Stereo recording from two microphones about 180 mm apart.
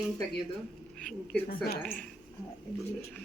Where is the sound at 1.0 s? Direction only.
5° left (ahead or behind).